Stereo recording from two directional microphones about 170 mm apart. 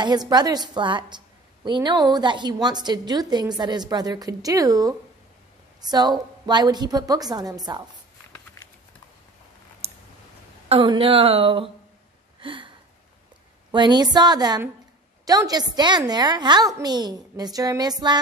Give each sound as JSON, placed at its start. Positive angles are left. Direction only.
{"t": 0.0, "sound": "a woman's voice", "side_deg": -25}
{"t": 9.8, "sound": "clicking", "side_deg": -35}
{"t": 10.7, "sound": "speech", "side_deg": -30}
{"t": 12.4, "sound": "a sound", "side_deg": -30}
{"t": 13.7, "sound": "a woman's voice", "side_deg": -25}